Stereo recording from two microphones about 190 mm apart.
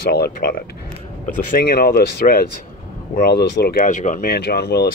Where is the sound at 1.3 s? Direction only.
50° left (ahead or behind).